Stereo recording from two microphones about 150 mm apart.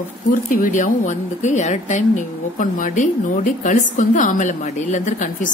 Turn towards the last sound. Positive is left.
turn(degrees=60)  # may be behind; listen again after turning